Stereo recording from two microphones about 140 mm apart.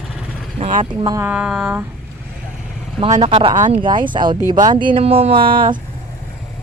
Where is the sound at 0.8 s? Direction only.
30° right (ahead or behind).